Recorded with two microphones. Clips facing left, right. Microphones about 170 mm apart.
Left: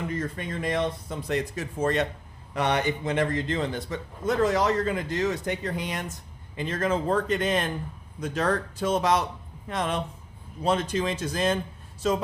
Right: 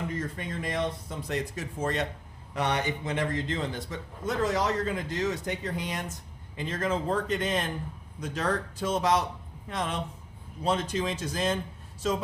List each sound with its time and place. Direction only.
0.3 s a man's voice: 70° left (ahead or behind)